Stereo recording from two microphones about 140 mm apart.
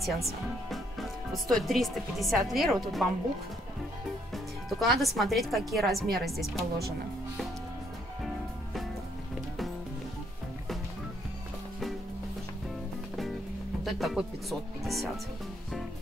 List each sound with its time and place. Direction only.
0.0 s speech: centre (ahead or behind)
4.3 s music: centre (ahead or behind)
5.0 s speech: centre (ahead or behind)
6.0 s speech: 90° right
6.3 s speech: centre (ahead or behind)
13.8 s speech: centre (ahead or behind)